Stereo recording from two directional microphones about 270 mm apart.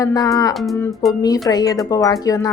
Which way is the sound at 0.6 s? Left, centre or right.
Centre.